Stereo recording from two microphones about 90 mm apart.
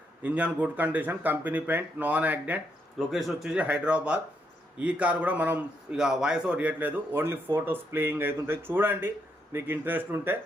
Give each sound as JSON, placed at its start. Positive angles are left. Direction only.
{"t": 0.2, "sound": "speech", "side_deg": -20}
{"t": 3.1, "sound": "a man's voice", "side_deg": 0}
{"t": 3.6, "sound": "a man's voice", "side_deg": -15}
{"t": 5.9, "sound": "speech", "side_deg": -5}